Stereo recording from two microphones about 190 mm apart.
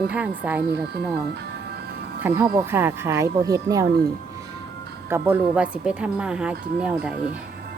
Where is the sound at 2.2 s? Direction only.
10° right (ahead or behind).